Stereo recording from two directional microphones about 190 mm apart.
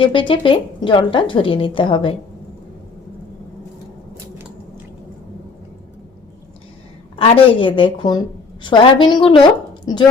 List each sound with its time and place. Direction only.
0.0 s speech: 25° left (ahead or behind)
7.2 s speech: 25° left (ahead or behind)